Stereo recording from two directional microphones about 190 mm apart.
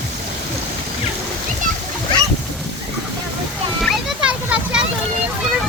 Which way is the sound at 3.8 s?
5° right (ahead or behind).